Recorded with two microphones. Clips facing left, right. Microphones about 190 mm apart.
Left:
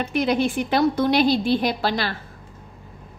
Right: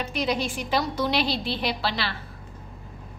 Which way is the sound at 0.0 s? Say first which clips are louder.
Left 6 dB; 55° left (ahead or behind).